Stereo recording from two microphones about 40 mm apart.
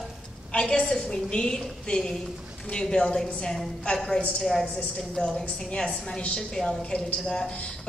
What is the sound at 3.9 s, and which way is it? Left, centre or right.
Speech, centre.